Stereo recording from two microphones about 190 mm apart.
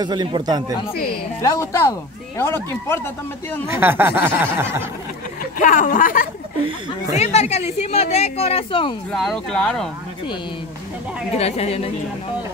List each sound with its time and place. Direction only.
0.0 s speech: 20° right (ahead or behind)
1.4 s speech: 15° left (ahead or behind)
3.6 s speech: 10° right (ahead or behind)
5.6 s speech: 45° left (ahead or behind)
9.1 s speech: centre (ahead or behind)
11.3 s speech: 35° left (ahead or behind)